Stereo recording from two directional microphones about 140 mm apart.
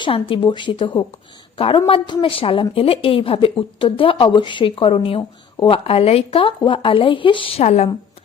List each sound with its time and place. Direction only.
0.0 s a woman's voice: 35° left (ahead or behind)